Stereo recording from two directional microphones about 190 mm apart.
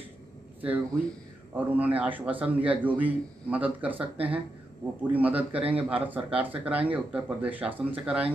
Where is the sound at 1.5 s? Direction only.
10° right (ahead or behind).